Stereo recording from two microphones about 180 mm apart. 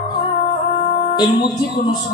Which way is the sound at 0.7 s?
30° left (ahead or behind).